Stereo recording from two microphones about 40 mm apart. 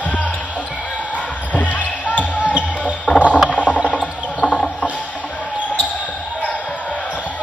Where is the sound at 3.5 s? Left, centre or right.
Left.